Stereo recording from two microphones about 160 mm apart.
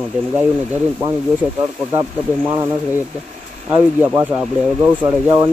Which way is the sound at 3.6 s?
15° right (ahead or behind).